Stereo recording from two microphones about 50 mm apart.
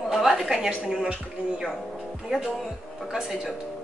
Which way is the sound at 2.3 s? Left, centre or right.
Centre.